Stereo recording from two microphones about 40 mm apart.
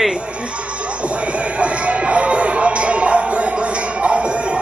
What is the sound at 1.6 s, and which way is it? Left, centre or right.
Music, right.